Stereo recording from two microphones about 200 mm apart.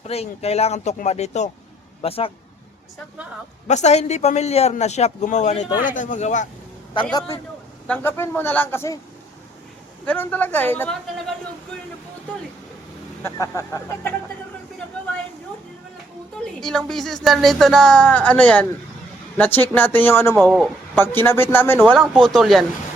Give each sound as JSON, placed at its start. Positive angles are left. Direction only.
{"t": 0.0, "sound": "speech", "side_deg": 30}
{"t": 3.7, "sound": "speech", "side_deg": 35}
{"t": 7.9, "sound": "speech", "side_deg": 10}
{"t": 10.1, "sound": "speech", "side_deg": 10}
{"t": 13.2, "sound": "speech", "side_deg": 15}
{"t": 16.4, "sound": "speech", "side_deg": 0}
{"t": 20.4, "sound": "speech", "side_deg": 0}
{"t": 20.9, "sound": "speech", "side_deg": 10}
{"t": 21.8, "sound": "speech", "side_deg": 0}